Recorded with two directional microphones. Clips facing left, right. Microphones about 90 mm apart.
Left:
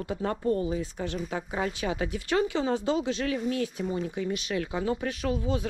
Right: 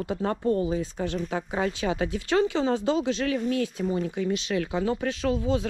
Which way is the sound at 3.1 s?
25° left (ahead or behind).